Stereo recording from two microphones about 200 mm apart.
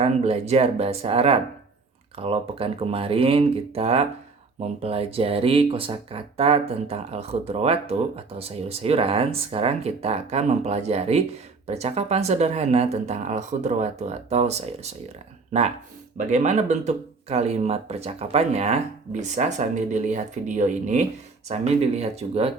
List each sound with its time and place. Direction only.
0.0 s speech: 30° right (ahead or behind)